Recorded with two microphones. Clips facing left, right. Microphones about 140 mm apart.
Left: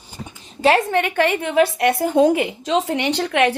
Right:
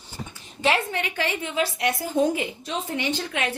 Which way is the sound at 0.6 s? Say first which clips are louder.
Left 7 dB; 40° left (ahead or behind).